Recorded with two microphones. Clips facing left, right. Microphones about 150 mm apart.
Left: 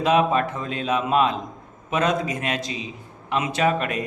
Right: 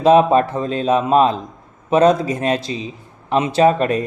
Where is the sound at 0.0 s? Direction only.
35° right (ahead or behind).